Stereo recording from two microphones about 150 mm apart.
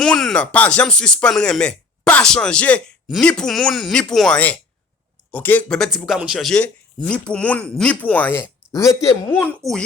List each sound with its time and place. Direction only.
0.0 s speech: 5° left (ahead or behind); by 9.0 s 20° left (ahead or behind)
9.6 s speech: 20° right (ahead or behind)